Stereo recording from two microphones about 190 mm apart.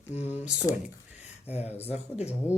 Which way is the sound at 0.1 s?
35° left (ahead or behind).